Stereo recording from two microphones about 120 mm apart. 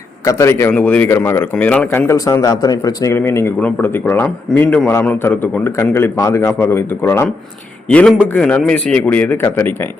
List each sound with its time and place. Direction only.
0.3 s speech: 25° left (ahead or behind)
0.7 s a man's voice: 10° left (ahead or behind)
2.1 s speech: 25° left (ahead or behind)
7.9 s a man's voice: 10° left (ahead or behind)